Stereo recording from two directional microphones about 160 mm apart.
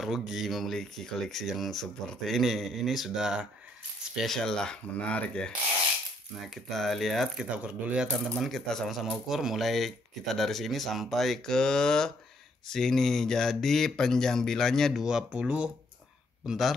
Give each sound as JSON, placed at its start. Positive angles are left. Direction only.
{"t": 0.0, "sound": "speech", "side_deg": 0}